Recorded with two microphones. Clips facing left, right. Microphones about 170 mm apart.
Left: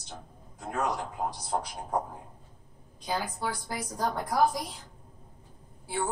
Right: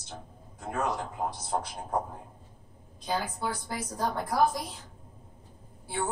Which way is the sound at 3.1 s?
10° left (ahead or behind).